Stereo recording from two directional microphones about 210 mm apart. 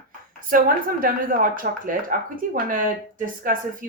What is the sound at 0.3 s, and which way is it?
Speech, 40° right (ahead or behind).